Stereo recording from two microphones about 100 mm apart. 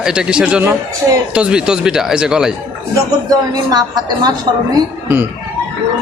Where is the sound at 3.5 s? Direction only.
45° right (ahead or behind).